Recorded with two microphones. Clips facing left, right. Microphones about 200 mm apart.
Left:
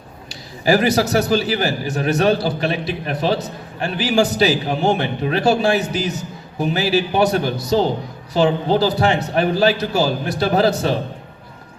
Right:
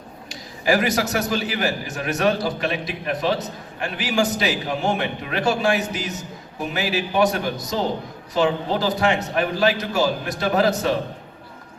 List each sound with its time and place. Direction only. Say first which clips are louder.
0.3 s a man's voice: left 4 dB; 30° left (ahead or behind)